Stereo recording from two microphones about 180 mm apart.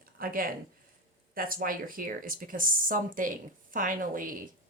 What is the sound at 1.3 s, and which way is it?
Speech, 50° right (ahead or behind).